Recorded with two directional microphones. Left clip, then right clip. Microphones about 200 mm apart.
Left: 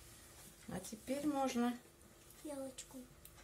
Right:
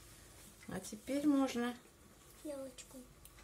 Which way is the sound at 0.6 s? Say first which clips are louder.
Right 1 dB; 25° right (ahead or behind).